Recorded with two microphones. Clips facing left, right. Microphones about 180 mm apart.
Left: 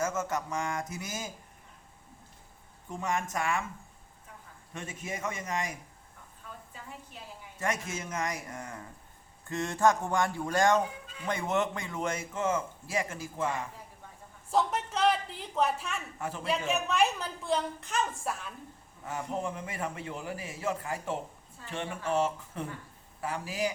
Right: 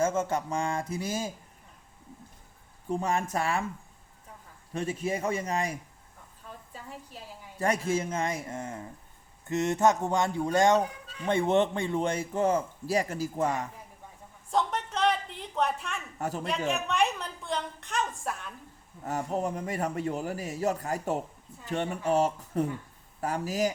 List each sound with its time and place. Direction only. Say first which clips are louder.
0.0 s a man's voice: right 4 dB; 30° right (ahead or behind)
2.9 s a man's voice: right 4 dB; 35° right (ahead or behind)
4.7 s a man's voice: right 9 dB; 35° right (ahead or behind)
7.6 s a man's voice: right 7 dB; 35° right (ahead or behind)
14.5 s a sound: even; 5° left (ahead or behind)
16.1 s a man's voice: right 4 dB; 40° right (ahead or behind)
16.5 s a woman's voice: left 2 dB; centre (ahead or behind)
19.0 s a man's voice: right 4 dB; 40° right (ahead or behind)